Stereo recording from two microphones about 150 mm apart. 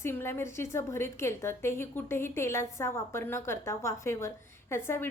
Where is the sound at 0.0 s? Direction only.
15° left (ahead or behind).